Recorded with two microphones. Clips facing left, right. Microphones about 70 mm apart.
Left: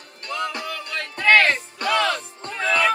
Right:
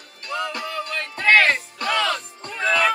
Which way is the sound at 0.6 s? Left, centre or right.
Right.